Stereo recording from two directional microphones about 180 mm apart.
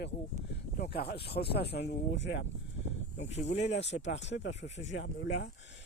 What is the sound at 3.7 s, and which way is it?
Speech, 75° left (ahead or behind).